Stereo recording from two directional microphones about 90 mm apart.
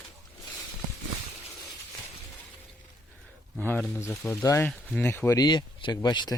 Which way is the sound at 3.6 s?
15° left (ahead or behind).